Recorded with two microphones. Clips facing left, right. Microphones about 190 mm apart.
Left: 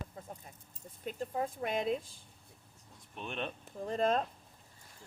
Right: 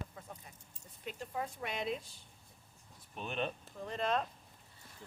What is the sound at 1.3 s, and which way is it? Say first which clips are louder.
Speech: left 5 dB; 45° left (ahead or behind).